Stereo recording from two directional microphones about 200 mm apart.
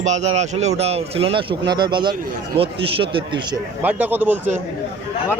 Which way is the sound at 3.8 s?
10° right (ahead or behind).